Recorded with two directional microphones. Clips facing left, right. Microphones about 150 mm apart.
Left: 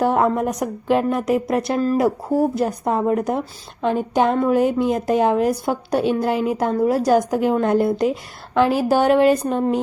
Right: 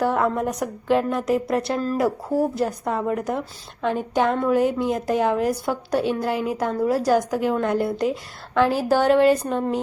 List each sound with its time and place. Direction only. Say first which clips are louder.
0.0 s a woman's voice: left 3 dB; 20° left (ahead or behind)